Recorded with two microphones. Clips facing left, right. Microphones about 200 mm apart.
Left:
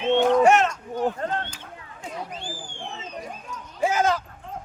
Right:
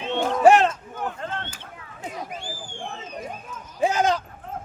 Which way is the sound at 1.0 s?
35° left (ahead or behind).